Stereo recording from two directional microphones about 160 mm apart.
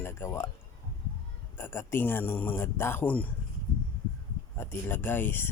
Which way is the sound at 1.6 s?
15° left (ahead or behind).